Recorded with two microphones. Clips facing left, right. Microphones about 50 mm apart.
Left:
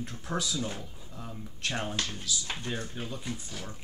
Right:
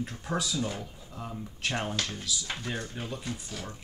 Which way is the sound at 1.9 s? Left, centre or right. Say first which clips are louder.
Right 1 dB; centre.